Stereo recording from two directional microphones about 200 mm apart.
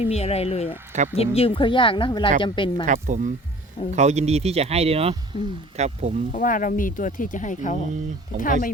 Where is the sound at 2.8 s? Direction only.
40° right (ahead or behind).